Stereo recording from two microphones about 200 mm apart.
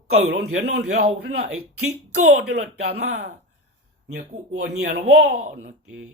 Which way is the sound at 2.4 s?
55° right (ahead or behind).